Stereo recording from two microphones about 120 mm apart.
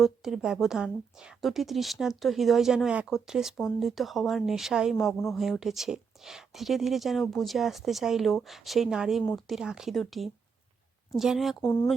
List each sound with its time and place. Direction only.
0.0 s speech: 5° right (ahead or behind)
11.6 s speech: 20° left (ahead or behind)